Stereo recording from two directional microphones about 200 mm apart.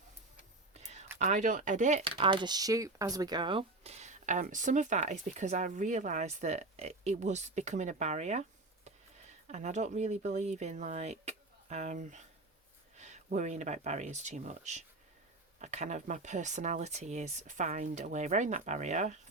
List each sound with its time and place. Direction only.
0.7 s a sound: 35° right (ahead or behind)
1.2 s speech: 40° right (ahead or behind)
2.1 s speech: 25° right (ahead or behind)